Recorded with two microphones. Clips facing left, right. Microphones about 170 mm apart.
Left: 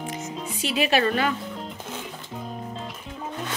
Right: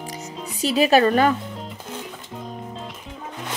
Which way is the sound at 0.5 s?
40° right (ahead or behind).